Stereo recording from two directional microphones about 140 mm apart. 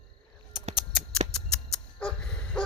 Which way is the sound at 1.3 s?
5° left (ahead or behind).